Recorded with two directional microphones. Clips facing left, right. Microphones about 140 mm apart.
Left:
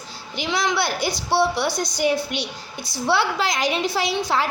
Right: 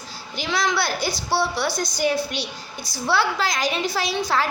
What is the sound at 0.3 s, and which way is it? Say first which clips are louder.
A woman's voice: left 1 dB; 20° left (ahead or behind).